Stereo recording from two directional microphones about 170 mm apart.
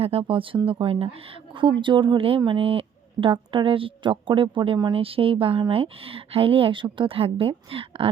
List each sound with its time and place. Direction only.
0.0 s a woman's voice: 35° right (ahead or behind)